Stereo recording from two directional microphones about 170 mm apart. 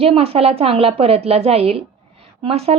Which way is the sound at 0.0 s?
35° right (ahead or behind).